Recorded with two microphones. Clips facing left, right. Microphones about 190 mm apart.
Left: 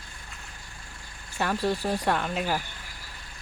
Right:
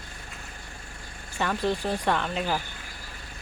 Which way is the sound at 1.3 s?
5° left (ahead or behind).